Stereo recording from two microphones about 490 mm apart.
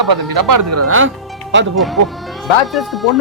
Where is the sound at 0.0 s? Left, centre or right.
Right.